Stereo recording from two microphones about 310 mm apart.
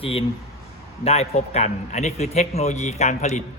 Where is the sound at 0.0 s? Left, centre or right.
Centre.